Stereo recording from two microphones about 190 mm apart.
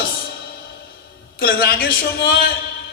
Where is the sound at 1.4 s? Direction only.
55° left (ahead or behind).